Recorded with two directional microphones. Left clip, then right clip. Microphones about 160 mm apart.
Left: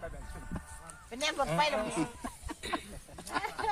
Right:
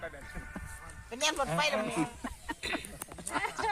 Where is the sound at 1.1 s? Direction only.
90° right.